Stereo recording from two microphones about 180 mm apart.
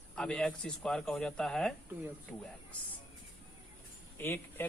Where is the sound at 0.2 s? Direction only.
5° left (ahead or behind).